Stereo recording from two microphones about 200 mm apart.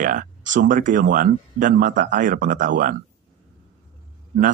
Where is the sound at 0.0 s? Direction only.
40° right (ahead or behind).